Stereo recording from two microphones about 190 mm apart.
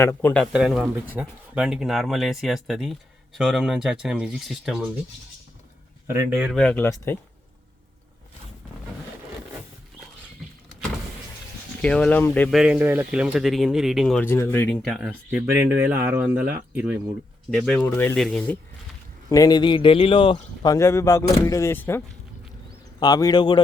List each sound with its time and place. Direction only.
0.0 s a man's voice: 10° left (ahead or behind)
0.5 s speech: 5° right (ahead or behind)
6.1 s speech: 15° right (ahead or behind)
6.5 s a man's voice: 5° left (ahead or behind)
11.8 s a man's voice: 5° left (ahead or behind)
12.5 s speech: 5° right (ahead or behind)
14.3 s a man's voice: 10° left (ahead or behind)
14.8 s speech: centre (ahead or behind)
15.4 s speech: 15° right (ahead or behind)
17.8 s a man's voice: 10° left (ahead or behind)
19.3 s a man's voice: 20° left (ahead or behind)